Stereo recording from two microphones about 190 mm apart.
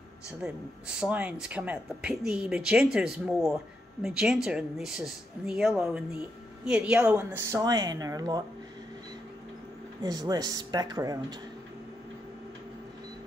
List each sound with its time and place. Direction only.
0.9 s speech: 5° right (ahead or behind)
10.0 s speech: 20° right (ahead or behind)